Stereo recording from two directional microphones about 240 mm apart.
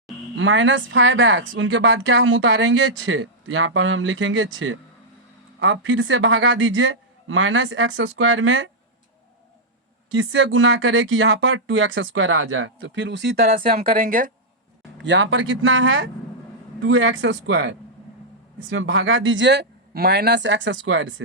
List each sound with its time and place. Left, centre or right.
0.3 s a man's voice: right
10.2 s speech: right
14.9 s speech: right